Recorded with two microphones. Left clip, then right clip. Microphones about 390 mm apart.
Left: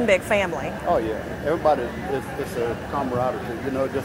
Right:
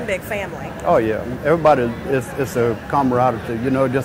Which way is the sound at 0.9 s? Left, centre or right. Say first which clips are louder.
Right 7 dB; right.